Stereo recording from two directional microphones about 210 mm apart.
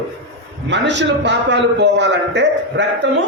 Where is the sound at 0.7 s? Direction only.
55° right (ahead or behind).